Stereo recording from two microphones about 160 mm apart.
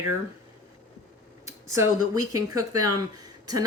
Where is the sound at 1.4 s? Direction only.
20° right (ahead or behind).